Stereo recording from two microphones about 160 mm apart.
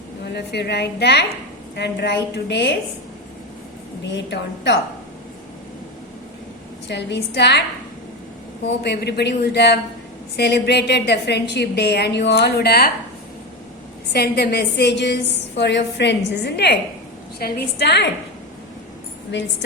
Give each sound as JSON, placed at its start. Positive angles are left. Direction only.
{"t": 0.3, "sound": "a woman's voice", "side_deg": 90}
{"t": 4.0, "sound": "a woman's voice", "side_deg": 90}
{"t": 6.8, "sound": "a woman's voice", "side_deg": 90}
{"t": 8.8, "sound": "a woman's voice", "side_deg": 90}
{"t": 14.1, "sound": "a woman's voice", "side_deg": 90}